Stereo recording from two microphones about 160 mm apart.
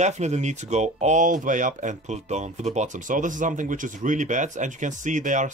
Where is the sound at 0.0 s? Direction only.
45° right (ahead or behind).